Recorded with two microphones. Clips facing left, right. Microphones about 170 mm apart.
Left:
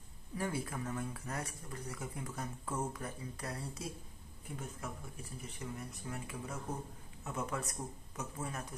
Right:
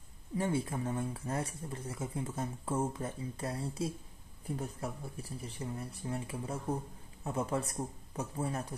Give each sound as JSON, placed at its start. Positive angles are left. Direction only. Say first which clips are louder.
{"t": 0.4, "sound": "speech", "louder": "right 5 dB", "side_deg": -25}